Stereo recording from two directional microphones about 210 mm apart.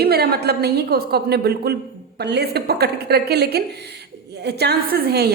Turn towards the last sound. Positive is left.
turn(degrees=-50)  # may be behind; listen again after turning